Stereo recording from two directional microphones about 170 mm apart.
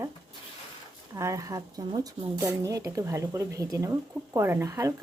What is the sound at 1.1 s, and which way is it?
A woman's voice, 20° right (ahead or behind).